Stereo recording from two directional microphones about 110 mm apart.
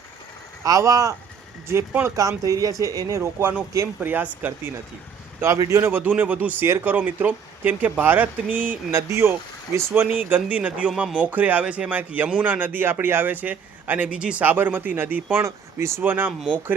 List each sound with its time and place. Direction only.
0.6 s speech: 30° right (ahead or behind)
1.6 s speech: 20° right (ahead or behind)
2.4 s speech: 30° right (ahead or behind)
3.2 s a man's voice: 20° right (ahead or behind)